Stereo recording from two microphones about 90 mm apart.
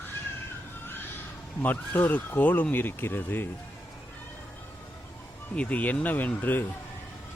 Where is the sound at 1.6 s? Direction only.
20° left (ahead or behind).